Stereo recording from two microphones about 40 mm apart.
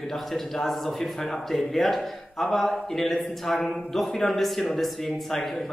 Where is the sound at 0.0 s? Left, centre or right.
Centre.